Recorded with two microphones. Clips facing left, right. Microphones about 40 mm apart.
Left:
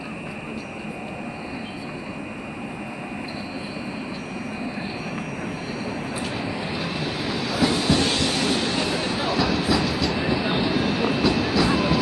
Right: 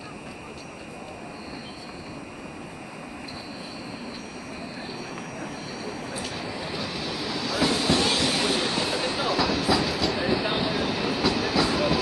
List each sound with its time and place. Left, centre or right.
5.9 s vehicle: left
7.5 s train: centre